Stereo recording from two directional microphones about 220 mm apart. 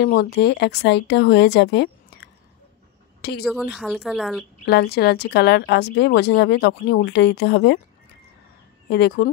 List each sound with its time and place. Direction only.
0.0 s speech: 45° left (ahead or behind)
3.2 s a sound: 45° left (ahead or behind)
3.4 s speech: centre (ahead or behind)
4.6 s speech: 45° left (ahead or behind)
8.8 s speech: 50° left (ahead or behind)